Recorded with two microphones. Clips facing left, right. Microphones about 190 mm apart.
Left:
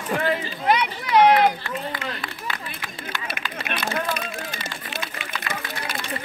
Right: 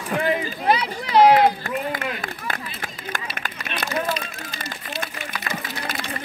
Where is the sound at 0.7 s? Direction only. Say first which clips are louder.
Even; 30° right (ahead or behind).